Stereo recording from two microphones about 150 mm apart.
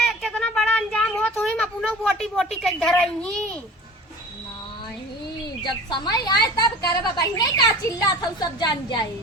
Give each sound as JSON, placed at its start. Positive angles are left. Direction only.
{"t": 0.0, "sound": "a sound", "side_deg": 0}
{"t": 2.3, "sound": "a woman's voice", "side_deg": 0}
{"t": 5.6, "sound": "a woman's voice", "side_deg": 30}